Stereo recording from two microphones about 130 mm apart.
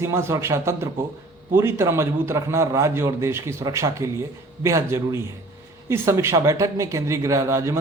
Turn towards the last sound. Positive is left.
turn(degrees=-20)  # may be behind; listen again after turning